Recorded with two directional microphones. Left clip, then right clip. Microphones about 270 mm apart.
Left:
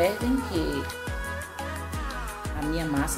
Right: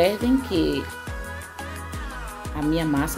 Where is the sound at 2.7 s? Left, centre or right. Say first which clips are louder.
Right 4 dB; right.